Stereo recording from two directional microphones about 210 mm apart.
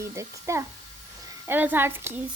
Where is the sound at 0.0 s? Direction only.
15° right (ahead or behind).